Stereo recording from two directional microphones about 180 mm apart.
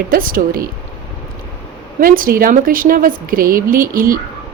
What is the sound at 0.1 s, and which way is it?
Speech, 50° right (ahead or behind).